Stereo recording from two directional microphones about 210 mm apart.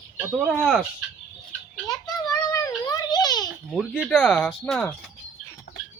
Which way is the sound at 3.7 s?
Centre (ahead or behind).